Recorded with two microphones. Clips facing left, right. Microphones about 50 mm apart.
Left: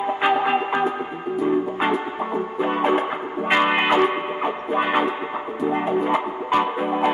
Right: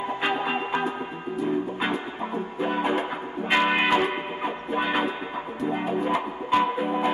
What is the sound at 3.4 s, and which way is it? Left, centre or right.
Music, left.